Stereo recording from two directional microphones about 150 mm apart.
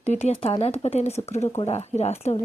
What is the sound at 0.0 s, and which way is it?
Speech, 45° left (ahead or behind).